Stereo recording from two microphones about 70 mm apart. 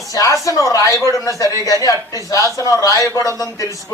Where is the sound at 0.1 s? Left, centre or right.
Left.